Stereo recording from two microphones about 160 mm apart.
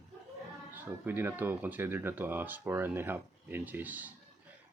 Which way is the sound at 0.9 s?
15° right (ahead or behind).